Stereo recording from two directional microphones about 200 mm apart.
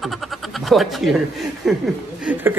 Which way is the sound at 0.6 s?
Centre (ahead or behind).